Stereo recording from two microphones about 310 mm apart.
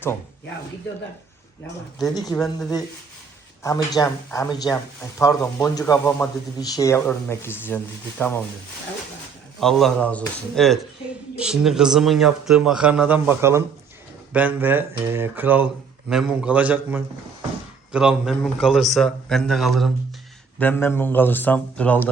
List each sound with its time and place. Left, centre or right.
2.1 s speech: centre
9.6 s speech: centre